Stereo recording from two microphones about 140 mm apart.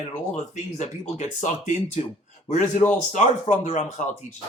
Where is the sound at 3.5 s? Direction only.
60° left (ahead or behind).